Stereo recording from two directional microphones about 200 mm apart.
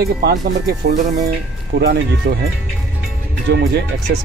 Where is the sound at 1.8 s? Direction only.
55° right (ahead or behind).